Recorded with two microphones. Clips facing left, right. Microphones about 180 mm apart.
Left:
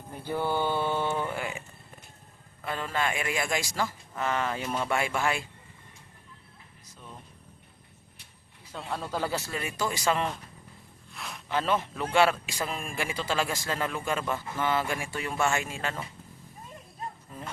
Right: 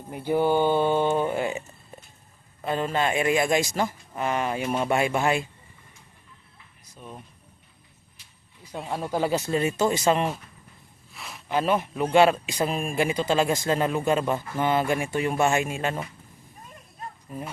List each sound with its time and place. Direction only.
0.1 s speech: 15° right (ahead or behind)
2.6 s a man's voice: 20° right (ahead or behind)
6.8 s a sound: 15° right (ahead or behind)
8.7 s a man's voice: 15° right (ahead or behind)
11.1 s a sound: centre (ahead or behind)
11.4 s a man's voice: 15° right (ahead or behind)